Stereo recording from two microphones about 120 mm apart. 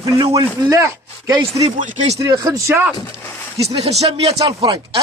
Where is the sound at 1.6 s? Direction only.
65° right (ahead or behind).